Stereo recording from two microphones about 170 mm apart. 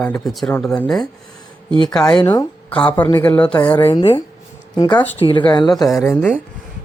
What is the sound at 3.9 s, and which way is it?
Speech, 30° left (ahead or behind).